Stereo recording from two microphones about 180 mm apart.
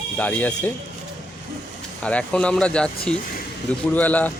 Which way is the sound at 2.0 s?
5° left (ahead or behind).